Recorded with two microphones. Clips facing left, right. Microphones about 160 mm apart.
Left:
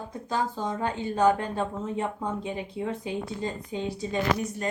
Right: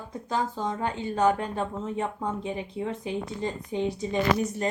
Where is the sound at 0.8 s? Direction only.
20° right (ahead or behind).